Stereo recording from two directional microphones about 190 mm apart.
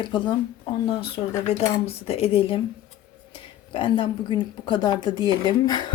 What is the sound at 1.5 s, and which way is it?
Speech, 35° left (ahead or behind).